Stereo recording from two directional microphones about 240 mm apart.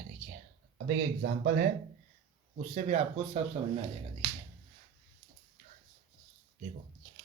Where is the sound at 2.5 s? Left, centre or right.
Right.